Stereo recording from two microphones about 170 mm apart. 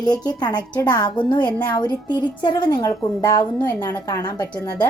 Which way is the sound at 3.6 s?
10° left (ahead or behind).